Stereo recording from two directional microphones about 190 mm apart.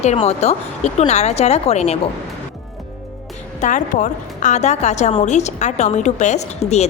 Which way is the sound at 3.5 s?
40° left (ahead or behind).